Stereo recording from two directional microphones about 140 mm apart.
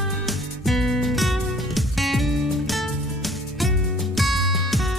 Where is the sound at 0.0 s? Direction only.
Centre (ahead or behind).